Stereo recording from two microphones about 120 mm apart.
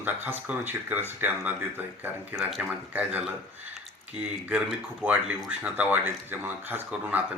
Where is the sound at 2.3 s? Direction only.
5° right (ahead or behind).